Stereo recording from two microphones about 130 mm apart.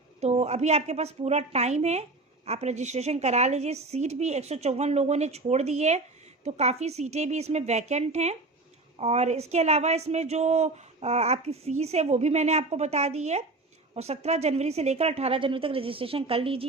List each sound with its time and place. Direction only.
0.2 s a woman's voice: 55° right (ahead or behind)